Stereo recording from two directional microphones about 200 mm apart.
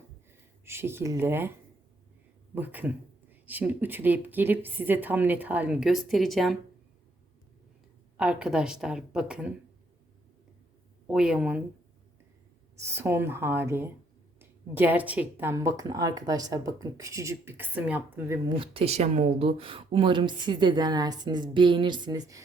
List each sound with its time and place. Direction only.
0.6 s speech: 10° right (ahead or behind)
2.6 s speech: 10° right (ahead or behind)
8.1 s a woman's voice: 5° right (ahead or behind)
11.1 s a woman's voice: 5° right (ahead or behind)
12.8 s speech: 10° right (ahead or behind)
18.4 s speech: 25° right (ahead or behind)